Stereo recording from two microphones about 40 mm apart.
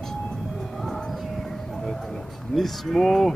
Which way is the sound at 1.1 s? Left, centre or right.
Centre.